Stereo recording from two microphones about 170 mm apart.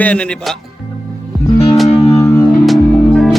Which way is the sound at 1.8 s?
35° left (ahead or behind).